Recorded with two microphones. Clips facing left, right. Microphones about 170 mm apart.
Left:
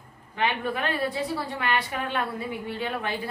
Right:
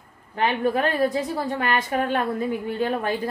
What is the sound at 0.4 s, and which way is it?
A woman's voice, 45° right (ahead or behind).